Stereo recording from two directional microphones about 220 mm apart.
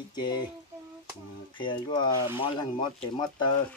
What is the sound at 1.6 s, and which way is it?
Speech, 20° left (ahead or behind).